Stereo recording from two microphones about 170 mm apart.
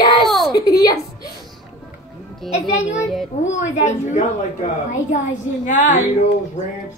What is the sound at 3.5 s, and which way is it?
Speech, 90° left.